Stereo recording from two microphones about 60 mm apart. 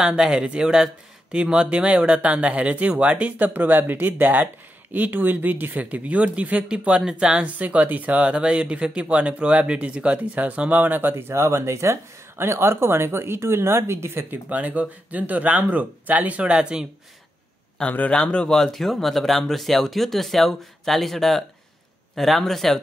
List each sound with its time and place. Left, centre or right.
0.0 s speech: centre
7.1 s speech: centre
7.4 s speech: right
14.3 s speech: right
17.8 s a man's voice: left
18.5 s speech: centre